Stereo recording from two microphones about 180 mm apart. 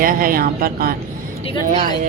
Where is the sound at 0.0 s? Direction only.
50° right (ahead or behind).